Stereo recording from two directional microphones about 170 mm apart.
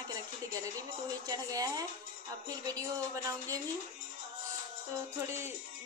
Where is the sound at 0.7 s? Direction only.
20° right (ahead or behind).